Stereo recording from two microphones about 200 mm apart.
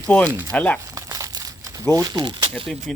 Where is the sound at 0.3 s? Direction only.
15° right (ahead or behind).